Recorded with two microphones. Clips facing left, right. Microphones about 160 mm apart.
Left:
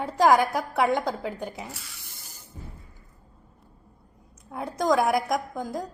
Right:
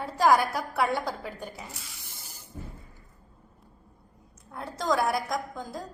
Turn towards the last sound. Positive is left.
turn(degrees=20)  # may be behind; listen again after turning